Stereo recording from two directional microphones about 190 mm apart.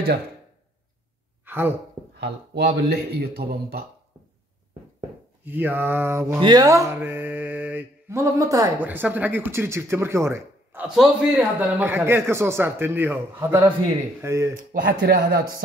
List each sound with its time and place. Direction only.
1.4 s speech: 10° right (ahead or behind)
2.1 s speech: 55° right (ahead or behind)
5.4 s mantra: 10° right (ahead or behind)
14.6 s speech: 45° right (ahead or behind)